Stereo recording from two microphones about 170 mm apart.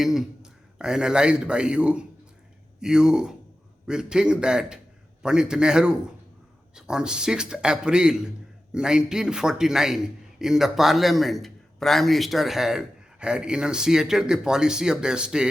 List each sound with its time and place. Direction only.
0.0 s a man's voice: centre (ahead or behind)